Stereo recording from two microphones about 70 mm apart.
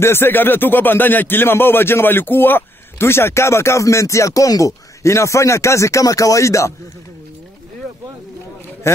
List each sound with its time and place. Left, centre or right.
0.0 s speech: left
8.8 s speech: left